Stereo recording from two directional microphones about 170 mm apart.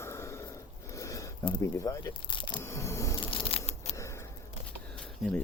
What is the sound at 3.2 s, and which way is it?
Tearing, 30° left (ahead or behind).